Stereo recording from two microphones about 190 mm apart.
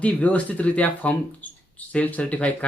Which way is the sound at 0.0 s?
5° left (ahead or behind).